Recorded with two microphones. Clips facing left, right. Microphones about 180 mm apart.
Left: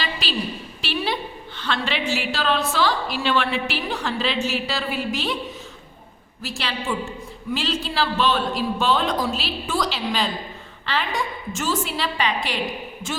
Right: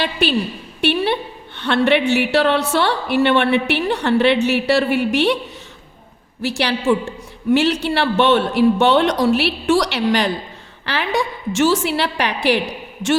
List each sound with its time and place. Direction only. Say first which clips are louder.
0.0 s a woman's voice: right 8 dB; 60° right (ahead or behind)
6.4 s a woman's voice: right 10 dB; 75° right (ahead or behind)